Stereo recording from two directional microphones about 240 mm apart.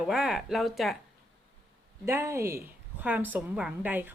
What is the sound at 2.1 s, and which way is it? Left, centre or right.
Speech, centre.